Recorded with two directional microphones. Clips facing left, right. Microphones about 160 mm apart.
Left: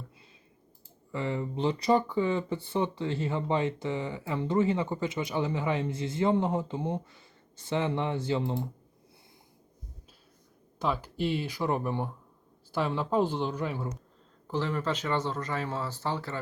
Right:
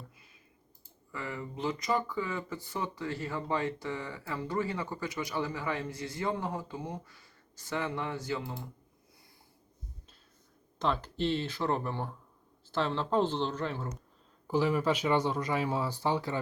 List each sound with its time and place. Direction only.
1.1 s speech: 25° left (ahead or behind)
10.8 s speech: 10° left (ahead or behind)
14.4 s speech: 10° right (ahead or behind)